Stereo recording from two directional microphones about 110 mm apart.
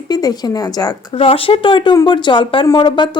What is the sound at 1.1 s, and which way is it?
Speech, 60° left (ahead or behind).